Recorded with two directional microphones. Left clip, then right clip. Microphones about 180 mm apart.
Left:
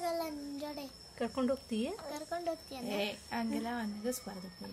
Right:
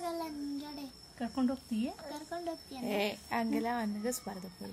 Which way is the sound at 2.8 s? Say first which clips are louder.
Right 4 dB; 35° right (ahead or behind).